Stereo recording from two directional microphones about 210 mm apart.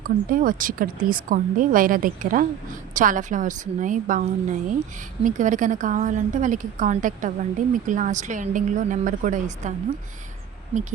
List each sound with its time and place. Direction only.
0.0 s a woman's voice: 40° right (ahead or behind)